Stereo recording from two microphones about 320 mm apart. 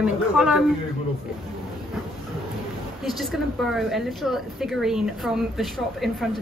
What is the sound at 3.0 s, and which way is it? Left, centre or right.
A woman's voice, centre.